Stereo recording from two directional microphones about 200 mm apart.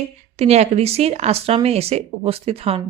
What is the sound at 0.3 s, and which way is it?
Speech, 30° right (ahead or behind).